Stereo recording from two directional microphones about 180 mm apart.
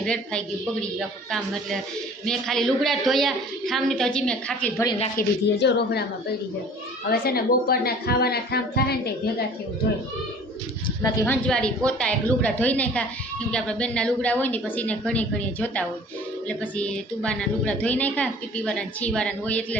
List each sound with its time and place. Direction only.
0.0 s a woman's voice: 5° left (ahead or behind)
5.1 s a woman's voice: 70° left (ahead or behind)
7.1 s speech: 60° left (ahead or behind)
11.3 s a woman's voice: 5° left (ahead or behind)